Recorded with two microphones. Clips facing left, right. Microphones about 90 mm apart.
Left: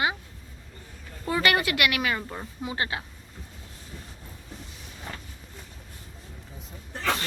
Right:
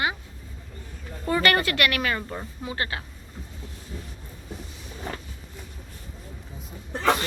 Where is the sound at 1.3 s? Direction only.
10° left (ahead or behind).